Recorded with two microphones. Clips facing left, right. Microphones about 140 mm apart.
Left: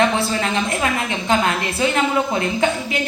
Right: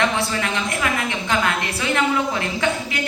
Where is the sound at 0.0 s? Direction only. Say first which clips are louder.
Left 3 dB; 25° left (ahead or behind).